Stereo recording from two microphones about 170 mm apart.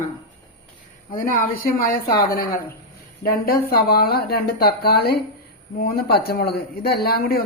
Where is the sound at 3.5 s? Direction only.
60° left (ahead or behind).